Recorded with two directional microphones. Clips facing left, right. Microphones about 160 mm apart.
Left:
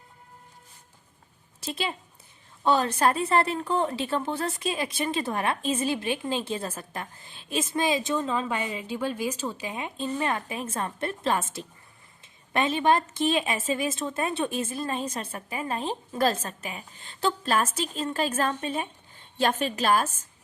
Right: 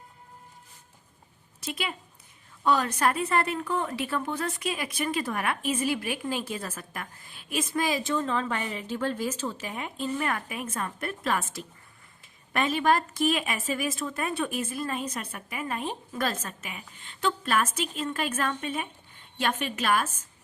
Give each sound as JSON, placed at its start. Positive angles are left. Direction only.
{"t": 1.6, "sound": "a woman's voice", "side_deg": 30}